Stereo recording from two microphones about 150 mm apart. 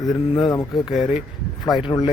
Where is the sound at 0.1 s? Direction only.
30° left (ahead or behind).